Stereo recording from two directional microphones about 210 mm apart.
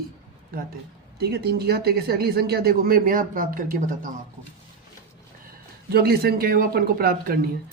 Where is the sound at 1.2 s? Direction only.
50° right (ahead or behind).